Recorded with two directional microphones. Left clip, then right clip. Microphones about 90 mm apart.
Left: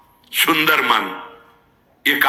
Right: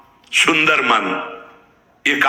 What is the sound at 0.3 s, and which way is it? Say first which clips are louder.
A man's voice: right 2 dB; 35° left (ahead or behind).